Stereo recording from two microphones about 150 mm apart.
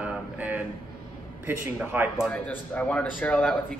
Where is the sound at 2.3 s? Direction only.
10° left (ahead or behind).